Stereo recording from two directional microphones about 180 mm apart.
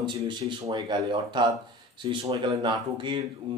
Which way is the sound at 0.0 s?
25° right (ahead or behind).